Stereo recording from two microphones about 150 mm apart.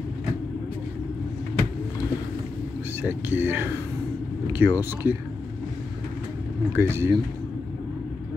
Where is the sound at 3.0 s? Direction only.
10° right (ahead or behind).